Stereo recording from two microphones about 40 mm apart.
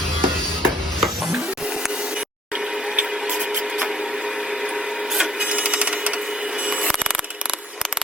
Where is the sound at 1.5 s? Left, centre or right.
Centre.